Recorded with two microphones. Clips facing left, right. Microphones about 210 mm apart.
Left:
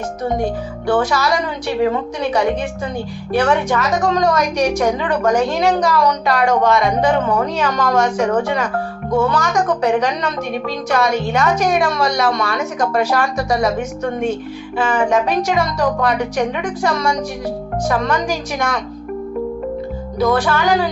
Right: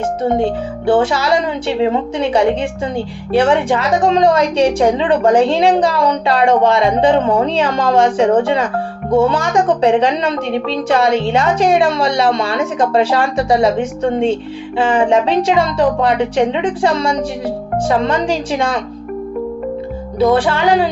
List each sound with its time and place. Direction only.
0.2 s a woman's voice: 25° right (ahead or behind)
20.1 s a woman's voice: 25° right (ahead or behind)